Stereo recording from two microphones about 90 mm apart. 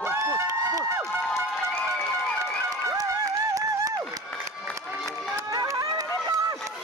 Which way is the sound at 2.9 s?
40° right (ahead or behind).